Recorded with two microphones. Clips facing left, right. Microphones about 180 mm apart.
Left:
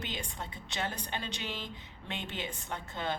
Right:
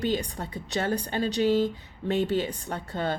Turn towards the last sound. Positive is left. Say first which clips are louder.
# right 7 dB
turn(degrees=-40)  # may be behind; listen again after turning